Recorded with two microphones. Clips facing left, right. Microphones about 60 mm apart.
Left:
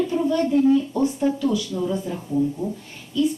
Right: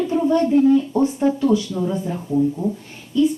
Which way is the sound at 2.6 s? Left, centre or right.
Right.